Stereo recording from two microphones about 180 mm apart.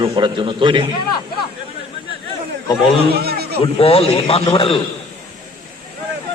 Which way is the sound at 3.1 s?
60° right (ahead or behind).